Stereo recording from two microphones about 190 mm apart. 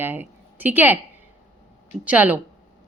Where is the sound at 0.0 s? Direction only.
10° right (ahead or behind).